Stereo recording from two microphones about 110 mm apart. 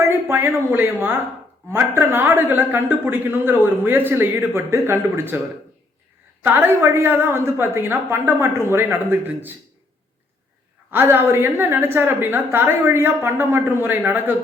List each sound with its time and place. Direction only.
0.1 s a woman's voice: 20° right (ahead or behind)
6.4 s a woman's voice: 20° right (ahead or behind)
10.9 s a woman's voice: 20° right (ahead or behind)